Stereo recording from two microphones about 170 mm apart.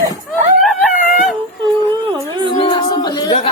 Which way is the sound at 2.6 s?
25° left (ahead or behind).